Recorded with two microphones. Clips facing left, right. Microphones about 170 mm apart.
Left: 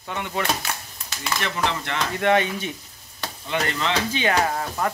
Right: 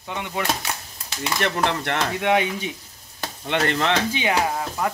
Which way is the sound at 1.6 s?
60° right (ahead or behind).